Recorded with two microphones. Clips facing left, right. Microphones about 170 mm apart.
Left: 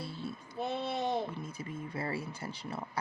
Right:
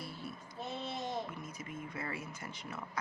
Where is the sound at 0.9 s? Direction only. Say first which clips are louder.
Left 6 dB; 65° left (ahead or behind).